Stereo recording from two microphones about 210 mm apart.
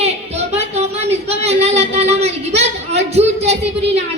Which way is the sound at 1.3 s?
30° right (ahead or behind).